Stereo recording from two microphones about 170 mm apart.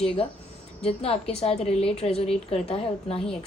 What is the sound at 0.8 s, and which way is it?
A woman's voice, 35° left (ahead or behind).